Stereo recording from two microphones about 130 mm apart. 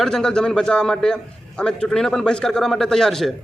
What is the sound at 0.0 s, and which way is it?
A man's voice, 5° left (ahead or behind).